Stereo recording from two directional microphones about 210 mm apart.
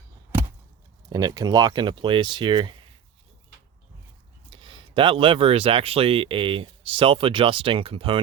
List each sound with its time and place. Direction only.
1.1 s speech: 20° right (ahead or behind)
4.5 s speech: 25° right (ahead or behind)